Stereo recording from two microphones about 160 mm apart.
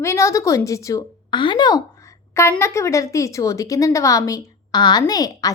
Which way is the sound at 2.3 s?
15° left (ahead or behind).